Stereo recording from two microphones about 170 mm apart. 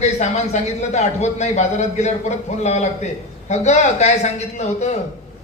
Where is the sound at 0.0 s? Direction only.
40° left (ahead or behind).